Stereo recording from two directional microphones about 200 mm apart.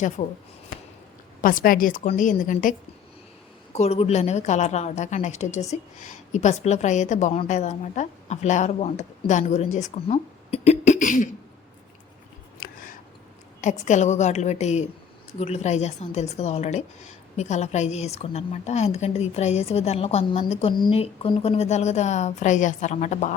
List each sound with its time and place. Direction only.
0.2 s a woman's voice: 30° left (ahead or behind)
1.4 s a woman's voice: 45° left (ahead or behind)
3.8 s a woman's voice: 30° left (ahead or behind)
12.5 s a sound: 40° left (ahead or behind)
13.6 s a woman's voice: 35° left (ahead or behind)